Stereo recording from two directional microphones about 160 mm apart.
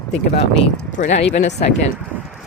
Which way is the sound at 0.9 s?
50° left (ahead or behind).